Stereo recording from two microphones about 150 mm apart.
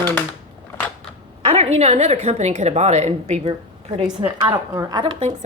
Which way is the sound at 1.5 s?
45° right (ahead or behind).